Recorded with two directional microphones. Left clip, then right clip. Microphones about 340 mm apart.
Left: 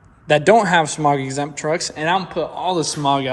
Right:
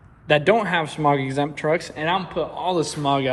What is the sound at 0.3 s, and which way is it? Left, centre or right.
Speech, centre.